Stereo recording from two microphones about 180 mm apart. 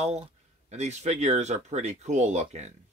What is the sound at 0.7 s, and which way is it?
Speech, 40° right (ahead or behind).